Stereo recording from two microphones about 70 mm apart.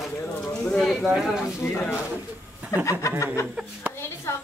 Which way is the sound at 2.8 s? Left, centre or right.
Left.